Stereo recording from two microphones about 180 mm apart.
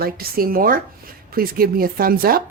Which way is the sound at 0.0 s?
55° right (ahead or behind).